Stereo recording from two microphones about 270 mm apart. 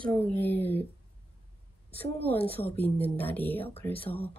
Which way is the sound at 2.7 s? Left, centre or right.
Centre.